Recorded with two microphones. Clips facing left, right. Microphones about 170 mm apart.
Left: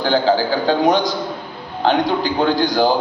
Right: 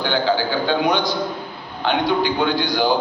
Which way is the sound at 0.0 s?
40° left (ahead or behind).